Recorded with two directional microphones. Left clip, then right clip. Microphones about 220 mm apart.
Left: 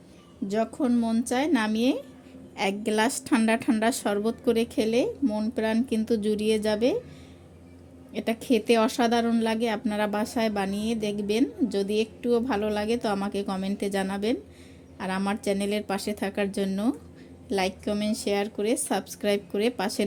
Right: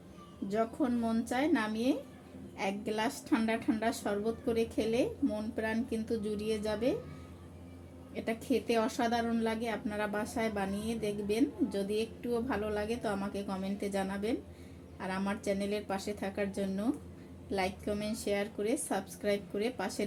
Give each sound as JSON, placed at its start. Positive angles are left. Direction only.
{"t": 0.4, "sound": "speech", "side_deg": 45}
{"t": 8.1, "sound": "speech", "side_deg": 50}